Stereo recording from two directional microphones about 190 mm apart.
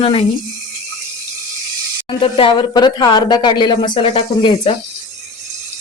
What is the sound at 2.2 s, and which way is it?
Speech, 30° left (ahead or behind).